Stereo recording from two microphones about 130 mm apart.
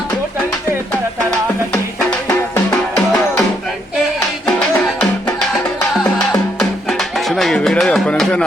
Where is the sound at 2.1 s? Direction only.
20° left (ahead or behind).